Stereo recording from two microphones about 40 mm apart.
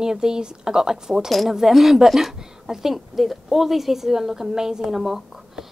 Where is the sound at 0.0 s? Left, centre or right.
Centre.